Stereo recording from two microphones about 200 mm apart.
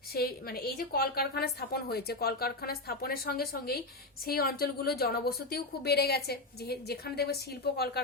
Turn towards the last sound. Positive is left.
turn(degrees=55)  # may be behind; listen again after turning